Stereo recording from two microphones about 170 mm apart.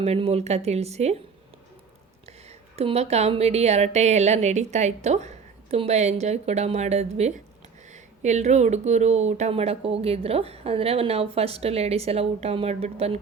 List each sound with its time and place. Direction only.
0.0 s speech: 35° right (ahead or behind)
2.2 s speech: 40° right (ahead or behind)